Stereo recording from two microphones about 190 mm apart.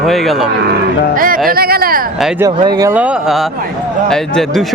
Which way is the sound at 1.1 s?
45° right (ahead or behind).